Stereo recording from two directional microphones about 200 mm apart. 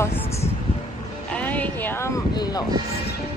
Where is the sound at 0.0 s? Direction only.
15° left (ahead or behind).